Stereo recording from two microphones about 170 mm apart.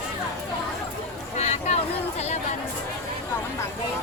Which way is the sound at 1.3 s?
40° left (ahead or behind).